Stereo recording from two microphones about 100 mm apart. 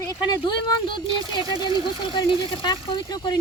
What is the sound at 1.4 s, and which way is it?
Speech, 40° right (ahead or behind).